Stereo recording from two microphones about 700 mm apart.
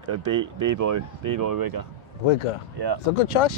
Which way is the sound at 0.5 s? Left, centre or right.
Right.